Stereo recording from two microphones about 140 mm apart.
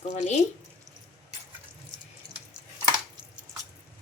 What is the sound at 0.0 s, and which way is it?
Speech, 50° left (ahead or behind).